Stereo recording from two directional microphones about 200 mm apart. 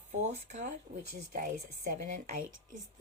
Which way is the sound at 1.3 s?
45° right (ahead or behind).